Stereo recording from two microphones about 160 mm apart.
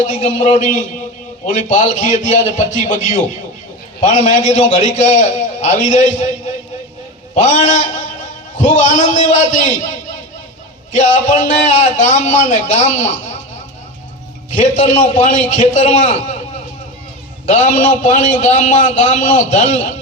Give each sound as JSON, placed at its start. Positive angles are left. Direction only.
{"t": 0.1, "sound": "a man's voice", "side_deg": 50}
{"t": 10.9, "sound": "a man's voice", "side_deg": 50}
{"t": 14.5, "sound": "a man's voice", "side_deg": 50}
{"t": 17.4, "sound": "a man's voice", "side_deg": 50}